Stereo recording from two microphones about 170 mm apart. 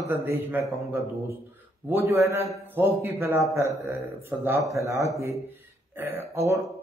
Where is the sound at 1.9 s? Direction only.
15° right (ahead or behind).